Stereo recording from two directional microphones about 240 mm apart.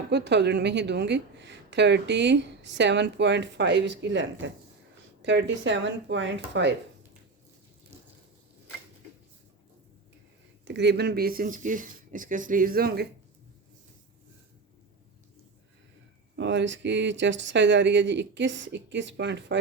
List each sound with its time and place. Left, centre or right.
0.1 s a woman's voice: right
10.7 s speech: right
16.3 s a woman's voice: right